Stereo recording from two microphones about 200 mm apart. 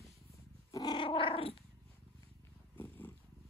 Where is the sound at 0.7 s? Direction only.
20° left (ahead or behind).